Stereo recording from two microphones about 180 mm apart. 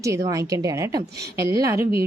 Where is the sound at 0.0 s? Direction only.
15° right (ahead or behind).